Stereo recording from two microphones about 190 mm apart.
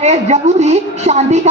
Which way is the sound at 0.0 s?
35° right (ahead or behind).